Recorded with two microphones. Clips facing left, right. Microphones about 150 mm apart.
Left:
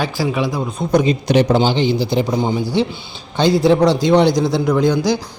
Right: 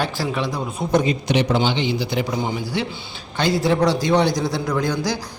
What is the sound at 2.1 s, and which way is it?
A man's voice, 25° left (ahead or behind).